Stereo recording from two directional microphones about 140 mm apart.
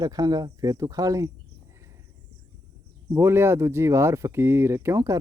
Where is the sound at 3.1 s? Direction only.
20° right (ahead or behind).